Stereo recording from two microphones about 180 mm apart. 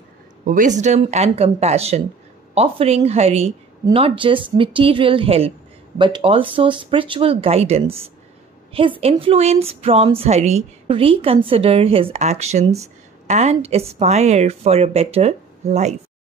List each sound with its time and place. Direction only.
0.5 s a woman's voice: 45° right (ahead or behind)